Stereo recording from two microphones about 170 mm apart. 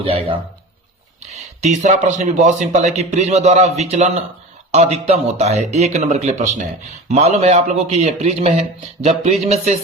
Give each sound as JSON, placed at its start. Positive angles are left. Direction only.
{"t": 0.0, "sound": "a man's voice", "side_deg": -35}
{"t": 1.2, "sound": "a sound", "side_deg": -40}
{"t": 2.0, "sound": "a man's voice", "side_deg": -45}